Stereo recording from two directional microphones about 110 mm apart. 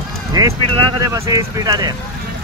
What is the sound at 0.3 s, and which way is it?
Speech, 35° right (ahead or behind).